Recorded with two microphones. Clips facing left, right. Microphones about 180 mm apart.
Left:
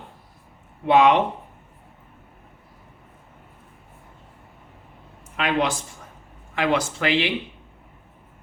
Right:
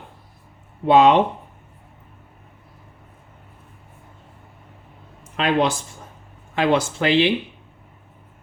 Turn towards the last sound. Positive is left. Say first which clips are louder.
# right 5 dB
turn(degrees=-25)  # may be behind; listen again after turning